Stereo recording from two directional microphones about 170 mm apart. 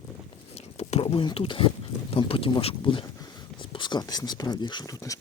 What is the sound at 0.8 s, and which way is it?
Speech, 35° left (ahead or behind).